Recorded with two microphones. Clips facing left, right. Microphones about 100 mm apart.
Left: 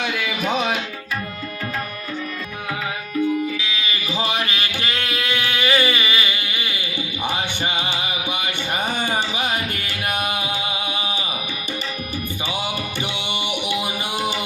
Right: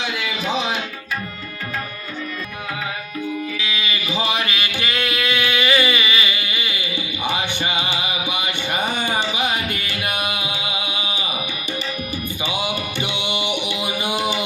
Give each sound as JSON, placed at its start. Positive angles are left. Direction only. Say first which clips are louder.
{"t": 0.0, "sound": "music", "louder": "left 1 dB", "side_deg": 55}
{"t": 4.4, "sound": "a sound", "louder": "right 1 dB", "side_deg": 35}
{"t": 9.7, "sound": "music", "louder": "even", "side_deg": 40}
{"t": 12.5, "sound": "music", "louder": "right 3 dB", "side_deg": -15}